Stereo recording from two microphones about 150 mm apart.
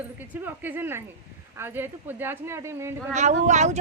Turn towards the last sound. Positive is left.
turn(degrees=-50)  # may be behind; listen again after turning